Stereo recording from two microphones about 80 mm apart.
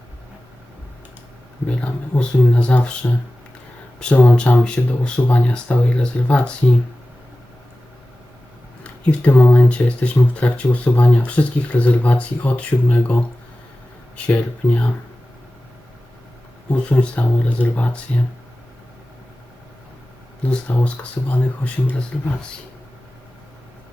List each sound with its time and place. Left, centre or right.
1.6 s speech: centre
4.3 s speech: centre
8.8 s a sound: centre
9.4 s speech: centre
14.3 s speech: centre
16.6 s speech: centre
20.4 s speech: centre